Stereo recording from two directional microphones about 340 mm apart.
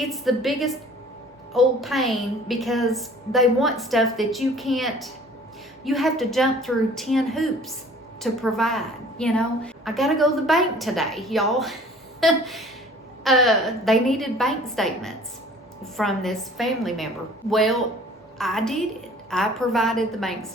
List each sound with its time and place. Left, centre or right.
0.0 s a woman's voice: centre